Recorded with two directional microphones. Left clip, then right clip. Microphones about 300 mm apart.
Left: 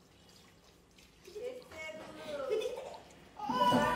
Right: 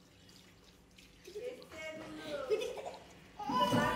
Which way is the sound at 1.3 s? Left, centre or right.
Left.